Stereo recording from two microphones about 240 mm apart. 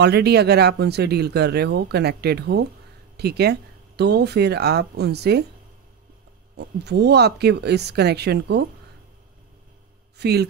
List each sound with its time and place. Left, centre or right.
0.0 s speech: right
6.5 s speech: right
10.1 s speech: right